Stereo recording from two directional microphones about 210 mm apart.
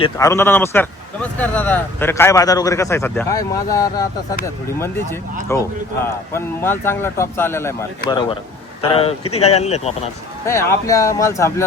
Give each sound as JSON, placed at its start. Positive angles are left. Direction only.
{"t": 0.0, "sound": "speech", "side_deg": 15}
{"t": 5.5, "sound": "speech", "side_deg": 10}
{"t": 8.8, "sound": "speech", "side_deg": 25}
{"t": 10.4, "sound": "speech", "side_deg": 15}